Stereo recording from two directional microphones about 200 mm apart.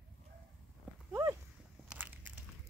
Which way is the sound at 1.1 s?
15° right (ahead or behind).